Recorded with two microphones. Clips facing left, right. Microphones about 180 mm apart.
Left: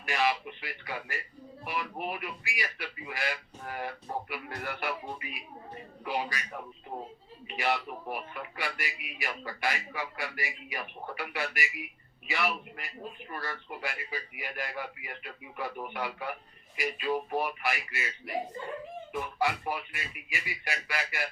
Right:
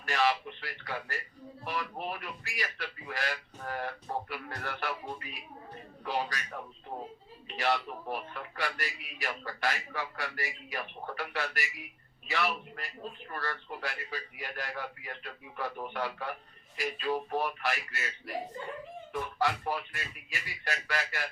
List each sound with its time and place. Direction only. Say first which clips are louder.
0.0 s speech: even; 10° left (ahead or behind)
7.4 s speech: even; 10° left (ahead or behind)
19.4 s speech: even; 10° left (ahead or behind)